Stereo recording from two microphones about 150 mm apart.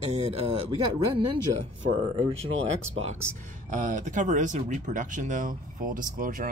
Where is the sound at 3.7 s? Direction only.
55° right (ahead or behind).